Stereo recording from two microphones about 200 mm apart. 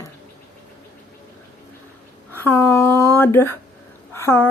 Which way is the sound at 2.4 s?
10° left (ahead or behind).